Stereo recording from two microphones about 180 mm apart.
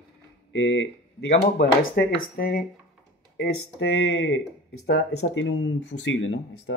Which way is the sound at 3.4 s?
80° left.